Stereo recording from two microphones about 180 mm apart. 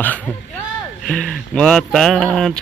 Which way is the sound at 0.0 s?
10° left (ahead or behind).